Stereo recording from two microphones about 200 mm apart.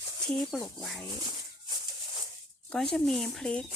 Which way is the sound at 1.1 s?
20° right (ahead or behind).